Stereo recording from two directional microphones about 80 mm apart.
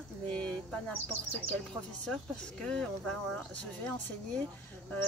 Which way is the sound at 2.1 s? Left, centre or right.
Centre.